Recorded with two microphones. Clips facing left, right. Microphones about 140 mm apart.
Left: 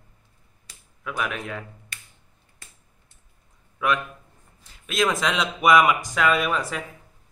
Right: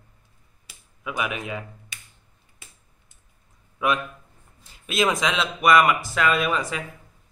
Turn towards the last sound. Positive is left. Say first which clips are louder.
# even
turn(degrees=5)  # may be behind; listen again after turning